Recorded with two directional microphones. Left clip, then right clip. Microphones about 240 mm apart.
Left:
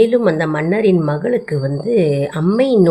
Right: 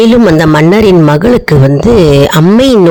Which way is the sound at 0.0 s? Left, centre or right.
Right.